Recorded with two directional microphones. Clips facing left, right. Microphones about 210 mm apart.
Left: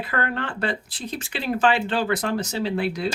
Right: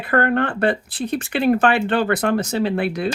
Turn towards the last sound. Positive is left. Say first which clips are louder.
# right 4 dB
turn(degrees=-55)  # may be behind; listen again after turning